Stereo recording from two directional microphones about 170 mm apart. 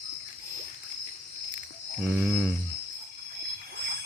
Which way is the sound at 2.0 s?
5° right (ahead or behind).